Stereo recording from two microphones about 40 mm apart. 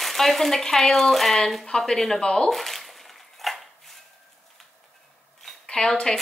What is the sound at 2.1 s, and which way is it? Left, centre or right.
Speech, left.